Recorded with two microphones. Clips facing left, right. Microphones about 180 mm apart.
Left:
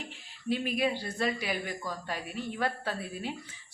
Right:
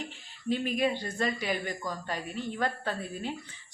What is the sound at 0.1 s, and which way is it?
A woman's voice, 5° left (ahead or behind).